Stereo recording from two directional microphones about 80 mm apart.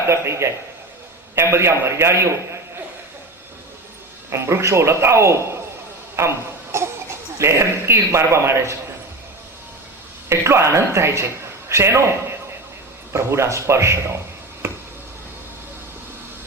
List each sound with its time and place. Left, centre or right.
0.1 s a man's voice: right
4.3 s a man's voice: right
6.1 s a sound: right
7.3 s a man's voice: right
10.2 s a man's voice: right
13.1 s a man's voice: right